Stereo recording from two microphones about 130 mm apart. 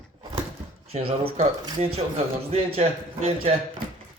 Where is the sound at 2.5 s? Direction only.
50° right (ahead or behind).